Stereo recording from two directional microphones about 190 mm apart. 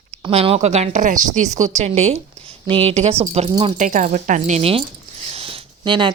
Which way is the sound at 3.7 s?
40° right (ahead or behind).